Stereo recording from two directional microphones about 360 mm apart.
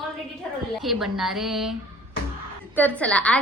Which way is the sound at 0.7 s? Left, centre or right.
Centre.